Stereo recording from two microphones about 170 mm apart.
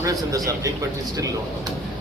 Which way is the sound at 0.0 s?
20° right (ahead or behind).